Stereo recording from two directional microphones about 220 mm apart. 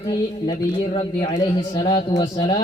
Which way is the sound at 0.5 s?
25° left (ahead or behind).